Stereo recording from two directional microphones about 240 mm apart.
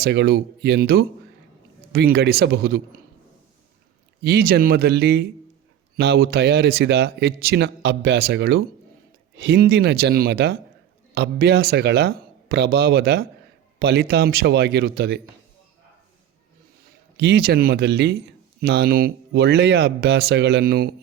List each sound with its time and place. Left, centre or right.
0.0 s speech: right
4.2 s a man's voice: right
17.2 s speech: right